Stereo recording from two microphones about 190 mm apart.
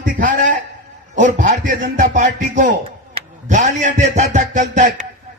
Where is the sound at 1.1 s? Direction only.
40° right (ahead or behind).